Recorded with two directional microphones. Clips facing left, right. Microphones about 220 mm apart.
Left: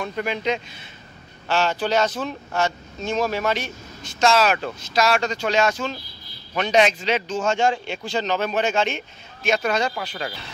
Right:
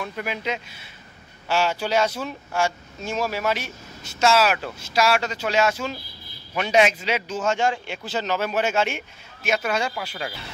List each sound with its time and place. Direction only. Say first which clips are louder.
0.0 s speech: left 4 dB; 5° right (ahead or behind)
7.3 s a man's voice: left 1 dB; 25° left (ahead or behind)
8.0 s speech: left 1 dB; 5° right (ahead or behind)